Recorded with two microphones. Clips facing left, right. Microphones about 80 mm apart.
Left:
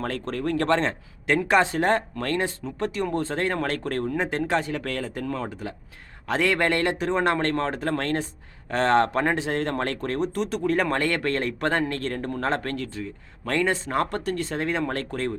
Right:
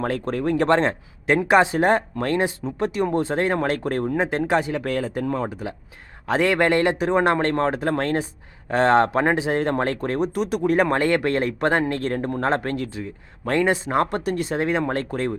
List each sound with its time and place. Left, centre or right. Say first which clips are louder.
0.0 s speech: right 4 dB; centre